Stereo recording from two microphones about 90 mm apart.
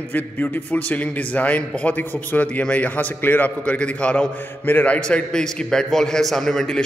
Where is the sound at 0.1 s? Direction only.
20° left (ahead or behind).